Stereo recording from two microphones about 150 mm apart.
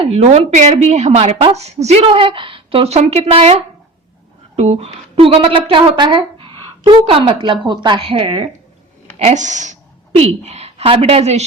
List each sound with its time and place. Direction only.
0.0 s a woman's voice: 45° right (ahead or behind)
4.5 s a woman's voice: 45° right (ahead or behind)
9.1 s a woman's voice: 50° right (ahead or behind)